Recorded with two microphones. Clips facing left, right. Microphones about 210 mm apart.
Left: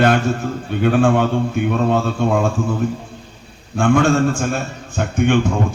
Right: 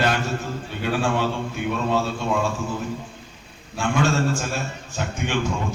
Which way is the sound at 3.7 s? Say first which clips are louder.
Left 8 dB; 55° left (ahead or behind).